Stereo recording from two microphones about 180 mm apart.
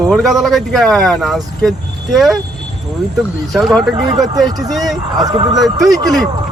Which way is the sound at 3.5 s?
Centre (ahead or behind).